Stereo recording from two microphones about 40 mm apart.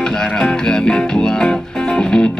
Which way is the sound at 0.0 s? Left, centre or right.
Centre.